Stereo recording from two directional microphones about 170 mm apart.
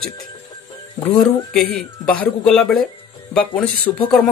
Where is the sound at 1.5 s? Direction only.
5° left (ahead or behind).